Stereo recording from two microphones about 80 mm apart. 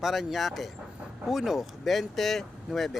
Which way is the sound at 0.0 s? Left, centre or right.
Centre.